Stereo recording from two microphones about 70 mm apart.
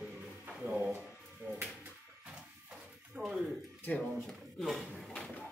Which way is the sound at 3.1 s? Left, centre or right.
Centre.